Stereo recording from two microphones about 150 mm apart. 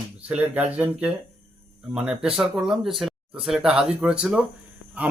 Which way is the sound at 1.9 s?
5° right (ahead or behind).